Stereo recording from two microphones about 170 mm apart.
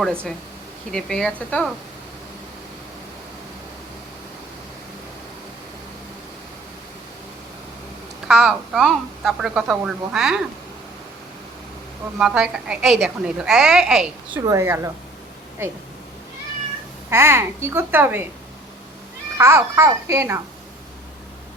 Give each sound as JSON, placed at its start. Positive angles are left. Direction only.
{"t": 0.9, "sound": "a woman's voice", "side_deg": 5}
{"t": 8.3, "sound": "a woman's voice", "side_deg": 0}
{"t": 12.2, "sound": "a woman's voice", "side_deg": -5}
{"t": 14.4, "sound": "a woman's voice", "side_deg": -15}
{"t": 17.1, "sound": "a woman's voice", "side_deg": -15}
{"t": 19.4, "sound": "a woman's voice", "side_deg": -15}